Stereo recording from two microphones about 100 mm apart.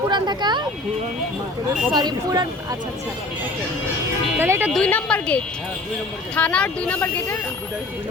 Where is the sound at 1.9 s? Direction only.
45° right (ahead or behind).